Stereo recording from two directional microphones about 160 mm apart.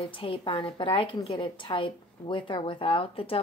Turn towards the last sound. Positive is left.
turn(degrees=35)  # may be behind; listen again after turning